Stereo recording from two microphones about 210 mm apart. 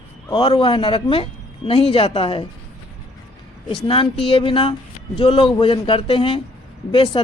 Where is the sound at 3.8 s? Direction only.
25° left (ahead or behind).